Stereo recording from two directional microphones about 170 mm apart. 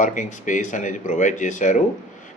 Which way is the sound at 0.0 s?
50° left (ahead or behind).